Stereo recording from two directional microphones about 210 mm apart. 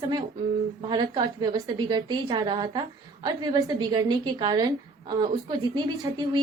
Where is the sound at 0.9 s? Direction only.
20° right (ahead or behind).